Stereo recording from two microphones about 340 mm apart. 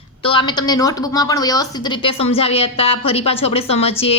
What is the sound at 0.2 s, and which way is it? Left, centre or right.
A woman's voice, centre.